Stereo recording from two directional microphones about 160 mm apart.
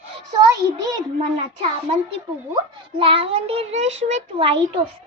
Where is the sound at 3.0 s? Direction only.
35° right (ahead or behind).